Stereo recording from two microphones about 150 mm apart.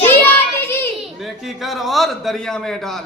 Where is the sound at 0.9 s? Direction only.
Centre (ahead or behind).